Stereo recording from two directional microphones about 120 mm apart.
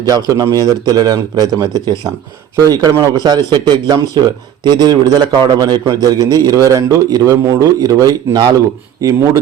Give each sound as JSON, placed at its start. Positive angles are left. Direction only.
{"t": 0.0, "sound": "a man's voice", "side_deg": -30}